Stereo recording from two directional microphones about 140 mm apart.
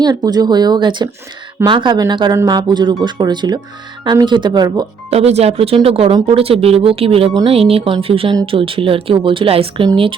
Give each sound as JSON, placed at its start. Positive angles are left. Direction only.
{"t": 0.0, "sound": "speech", "side_deg": -30}
{"t": 5.1, "sound": "speech", "side_deg": -50}